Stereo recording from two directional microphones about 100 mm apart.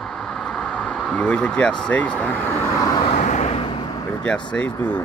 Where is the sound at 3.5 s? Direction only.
60° left (ahead or behind).